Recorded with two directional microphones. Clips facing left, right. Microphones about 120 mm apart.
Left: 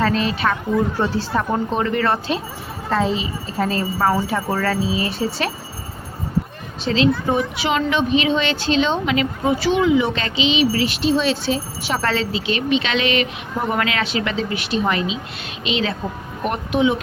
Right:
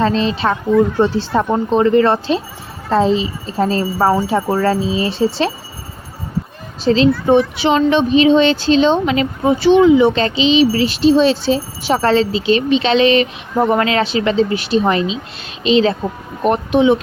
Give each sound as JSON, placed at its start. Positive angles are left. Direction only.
{"t": 0.0, "sound": "speech", "side_deg": -30}
{"t": 6.8, "sound": "speech", "side_deg": -35}